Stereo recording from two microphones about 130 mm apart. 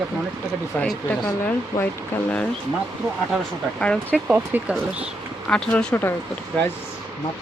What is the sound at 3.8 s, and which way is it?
Speech, 10° left (ahead or behind).